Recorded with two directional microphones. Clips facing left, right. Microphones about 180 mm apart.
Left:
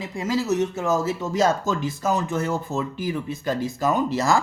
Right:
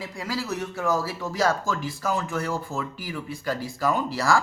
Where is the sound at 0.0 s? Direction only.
20° left (ahead or behind).